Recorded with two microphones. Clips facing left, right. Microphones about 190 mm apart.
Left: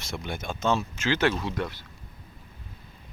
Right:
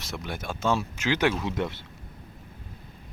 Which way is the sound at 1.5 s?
25° right (ahead or behind).